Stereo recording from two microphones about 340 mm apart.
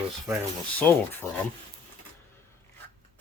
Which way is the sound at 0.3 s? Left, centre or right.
Centre.